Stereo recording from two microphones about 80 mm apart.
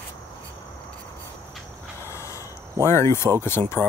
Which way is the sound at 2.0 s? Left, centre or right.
Left.